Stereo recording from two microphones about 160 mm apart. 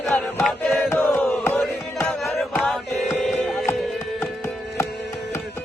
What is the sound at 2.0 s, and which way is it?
Music, centre (ahead or behind).